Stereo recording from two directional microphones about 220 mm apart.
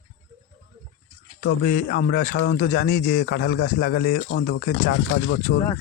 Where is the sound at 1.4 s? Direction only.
45° left (ahead or behind).